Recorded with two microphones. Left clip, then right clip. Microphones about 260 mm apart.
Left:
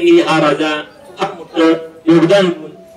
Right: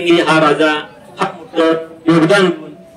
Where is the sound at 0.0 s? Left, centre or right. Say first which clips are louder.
Left 1 dB; centre.